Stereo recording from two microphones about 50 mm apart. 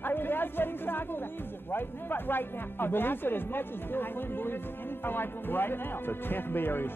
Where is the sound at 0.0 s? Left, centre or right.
Left.